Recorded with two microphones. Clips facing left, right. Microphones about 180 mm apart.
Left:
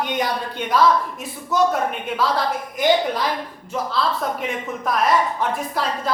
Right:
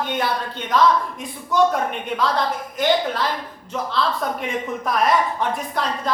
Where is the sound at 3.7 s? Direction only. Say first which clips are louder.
Even; centre (ahead or behind).